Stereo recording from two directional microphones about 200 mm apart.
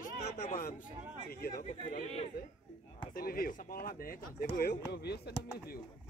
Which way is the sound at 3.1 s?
45° left (ahead or behind).